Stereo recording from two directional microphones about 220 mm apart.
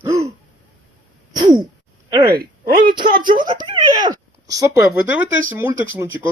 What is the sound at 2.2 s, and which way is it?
Speech, 45° right (ahead or behind).